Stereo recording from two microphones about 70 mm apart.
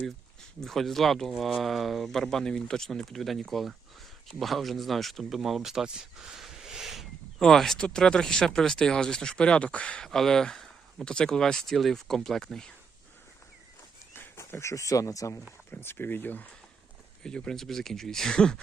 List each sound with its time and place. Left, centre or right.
0.6 s speech: centre
14.2 s speech: left
15.7 s speech: left
17.2 s speech: centre